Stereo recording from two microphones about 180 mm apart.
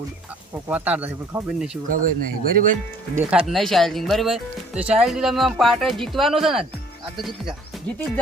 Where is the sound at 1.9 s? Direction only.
50° right (ahead or behind).